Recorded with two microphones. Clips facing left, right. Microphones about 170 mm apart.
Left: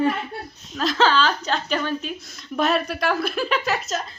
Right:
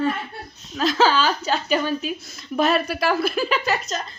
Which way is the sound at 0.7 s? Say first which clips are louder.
Right 1 dB; centre (ahead or behind).